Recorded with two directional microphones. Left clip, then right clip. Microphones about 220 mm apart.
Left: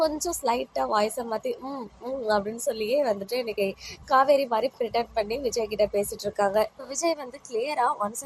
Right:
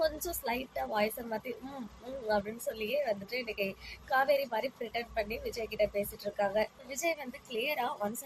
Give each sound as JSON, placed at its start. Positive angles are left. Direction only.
{"t": 0.0, "sound": "a woman's voice", "side_deg": 20}